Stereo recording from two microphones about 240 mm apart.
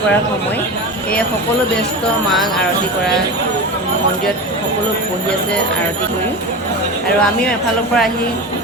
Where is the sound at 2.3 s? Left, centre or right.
Centre.